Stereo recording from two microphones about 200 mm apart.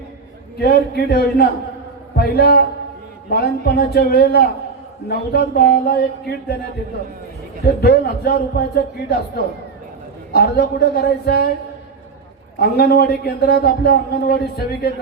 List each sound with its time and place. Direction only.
0.6 s a man's voice: 50° left (ahead or behind)
7.6 s a man's voice: 55° left (ahead or behind)
12.5 s a man's voice: 50° left (ahead or behind)